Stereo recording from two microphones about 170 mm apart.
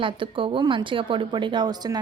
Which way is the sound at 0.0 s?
30° right (ahead or behind).